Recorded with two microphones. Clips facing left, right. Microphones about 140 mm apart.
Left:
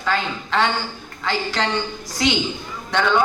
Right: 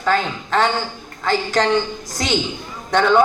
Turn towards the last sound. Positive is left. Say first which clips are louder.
# right 4 dB
turn(degrees=-45)  # may be behind; listen again after turning